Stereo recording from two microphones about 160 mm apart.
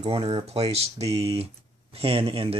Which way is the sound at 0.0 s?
35° right (ahead or behind).